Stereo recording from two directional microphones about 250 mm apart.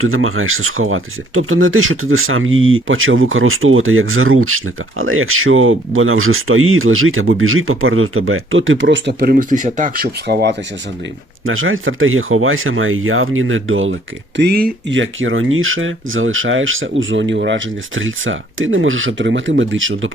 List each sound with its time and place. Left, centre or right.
0.0 s speech: right
11.4 s speech: right
14.3 s speech: right